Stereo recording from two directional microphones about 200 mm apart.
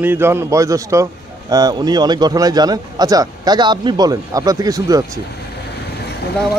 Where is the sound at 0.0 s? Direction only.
10° right (ahead or behind).